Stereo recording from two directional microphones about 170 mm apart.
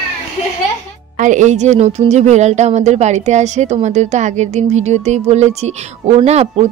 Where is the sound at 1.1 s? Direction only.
45° right (ahead or behind).